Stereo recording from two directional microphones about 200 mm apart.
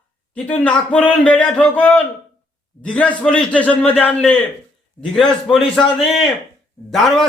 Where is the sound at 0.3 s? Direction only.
5° left (ahead or behind).